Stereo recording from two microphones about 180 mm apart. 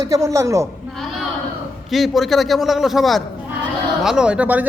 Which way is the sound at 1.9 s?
Centre (ahead or behind).